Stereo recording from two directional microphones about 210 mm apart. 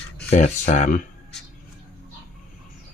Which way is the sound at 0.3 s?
35° left (ahead or behind).